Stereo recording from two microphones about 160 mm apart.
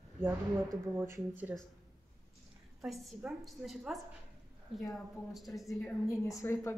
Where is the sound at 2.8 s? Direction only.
Centre (ahead or behind).